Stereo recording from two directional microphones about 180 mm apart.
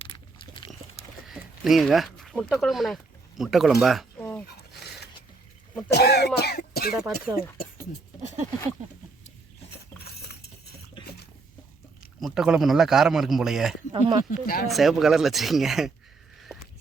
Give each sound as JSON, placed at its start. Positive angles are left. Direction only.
{"t": 0.1, "sound": "a sound", "side_deg": 30}
{"t": 1.3, "sound": "speech", "side_deg": 0}
{"t": 4.2, "sound": "dog", "side_deg": 10}
{"t": 5.9, "sound": "cough", "side_deg": 65}
{"t": 6.9, "sound": "speech", "side_deg": -10}
{"t": 12.2, "sound": "a man's voice", "side_deg": 0}
{"t": 14.3, "sound": "speech", "side_deg": 55}
{"t": 14.7, "sound": "a man's voice", "side_deg": 0}